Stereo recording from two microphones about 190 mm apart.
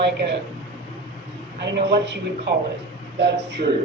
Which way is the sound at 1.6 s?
65° right (ahead or behind).